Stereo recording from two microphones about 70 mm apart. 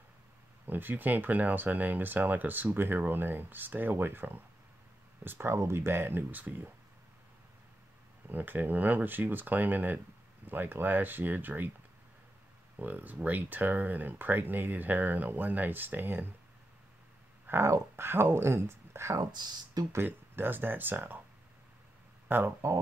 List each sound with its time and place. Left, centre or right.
0.7 s speech: right
8.3 s speech: right
12.7 s speech: right
17.5 s speech: right
19.1 s speech: right
19.9 s speech: right
22.3 s speech: right